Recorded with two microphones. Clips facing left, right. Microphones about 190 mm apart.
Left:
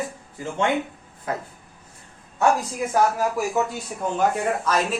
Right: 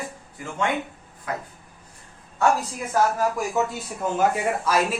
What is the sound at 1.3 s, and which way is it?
Speech, 25° left (ahead or behind).